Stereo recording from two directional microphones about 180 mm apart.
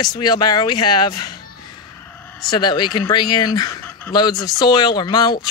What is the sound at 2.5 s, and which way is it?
Speech, 25° left (ahead or behind).